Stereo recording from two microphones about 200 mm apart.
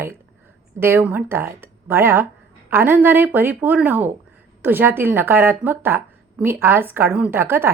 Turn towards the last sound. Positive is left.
turn(degrees=-10)  # may be behind; listen again after turning